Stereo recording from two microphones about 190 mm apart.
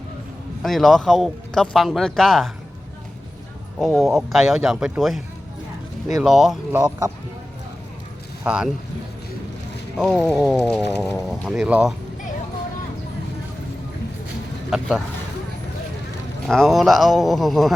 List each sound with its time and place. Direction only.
0.6 s speech: centre (ahead or behind)
3.8 s speech: centre (ahead or behind)
6.7 s speech: 20° right (ahead or behind)
8.4 s speech: 5° right (ahead or behind)
10.2 s speech: centre (ahead or behind)
14.7 s speech: centre (ahead or behind)
16.5 s speech: centre (ahead or behind)